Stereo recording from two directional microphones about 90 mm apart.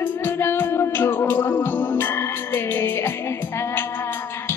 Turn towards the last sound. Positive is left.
turn(degrees=25)  # may be behind; listen again after turning